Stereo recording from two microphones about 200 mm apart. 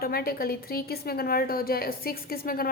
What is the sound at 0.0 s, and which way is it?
A woman's voice, 50° left (ahead or behind).